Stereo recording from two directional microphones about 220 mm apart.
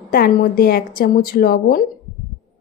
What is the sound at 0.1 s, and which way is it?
Speech, 40° left (ahead or behind).